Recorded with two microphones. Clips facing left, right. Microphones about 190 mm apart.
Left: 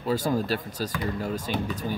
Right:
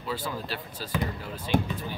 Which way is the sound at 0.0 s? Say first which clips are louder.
Left 8 dB; 45° left (ahead or behind).